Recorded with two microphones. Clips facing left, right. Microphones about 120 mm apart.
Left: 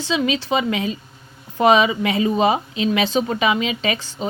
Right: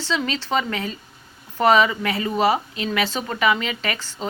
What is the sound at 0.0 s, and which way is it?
A woman's voice, 15° left (ahead or behind).